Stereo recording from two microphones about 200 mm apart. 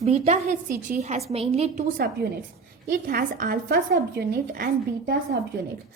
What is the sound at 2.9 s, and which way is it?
A woman's voice, 45° right (ahead or behind).